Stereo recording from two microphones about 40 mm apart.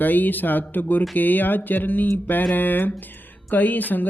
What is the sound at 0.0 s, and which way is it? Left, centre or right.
Speech, left.